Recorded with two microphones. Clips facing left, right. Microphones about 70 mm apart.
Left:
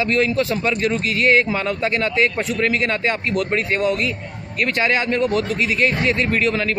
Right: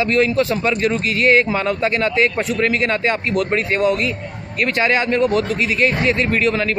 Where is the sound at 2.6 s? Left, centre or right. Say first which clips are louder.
Right 2 dB; right.